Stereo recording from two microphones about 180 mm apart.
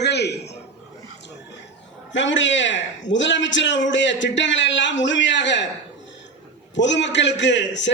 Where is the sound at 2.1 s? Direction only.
90° left.